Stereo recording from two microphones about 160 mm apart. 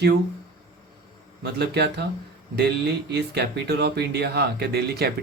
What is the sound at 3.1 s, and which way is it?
Speech, 90° right.